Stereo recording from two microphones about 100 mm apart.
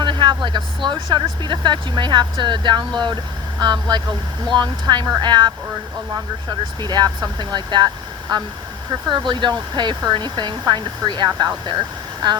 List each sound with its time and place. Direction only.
0.0 s vehicle: 50° right (ahead or behind)
0.4 s speech: 50° right (ahead or behind)
6.8 s speech: 45° right (ahead or behind)
9.0 s speech: 50° right (ahead or behind)